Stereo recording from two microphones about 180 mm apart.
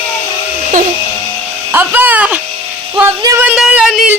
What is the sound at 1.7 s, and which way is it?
Speech, 10° right (ahead or behind).